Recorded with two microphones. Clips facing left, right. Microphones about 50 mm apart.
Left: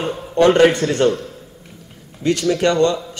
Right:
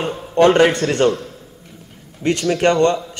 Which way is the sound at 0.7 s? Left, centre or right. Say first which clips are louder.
Even; right.